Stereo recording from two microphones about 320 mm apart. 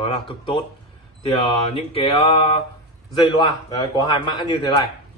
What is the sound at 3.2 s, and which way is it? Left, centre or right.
Speech, centre.